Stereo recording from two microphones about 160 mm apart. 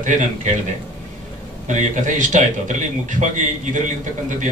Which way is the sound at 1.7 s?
50° right (ahead or behind).